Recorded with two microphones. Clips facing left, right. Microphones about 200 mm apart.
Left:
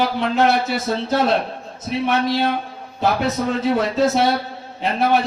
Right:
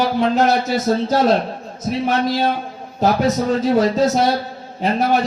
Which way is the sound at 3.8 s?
40° right (ahead or behind).